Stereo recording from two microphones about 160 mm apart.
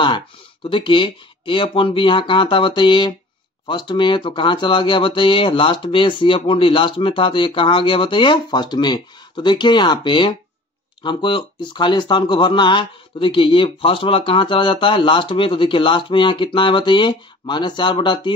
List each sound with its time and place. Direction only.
0.7 s speech: 30° left (ahead or behind)